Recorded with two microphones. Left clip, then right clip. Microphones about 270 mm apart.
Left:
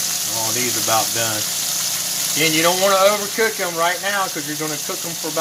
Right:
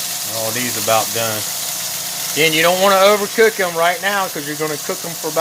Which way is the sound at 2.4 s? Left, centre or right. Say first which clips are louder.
Right 4 dB; right.